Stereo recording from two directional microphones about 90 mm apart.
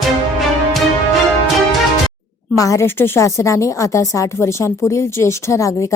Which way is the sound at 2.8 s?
25° left (ahead or behind).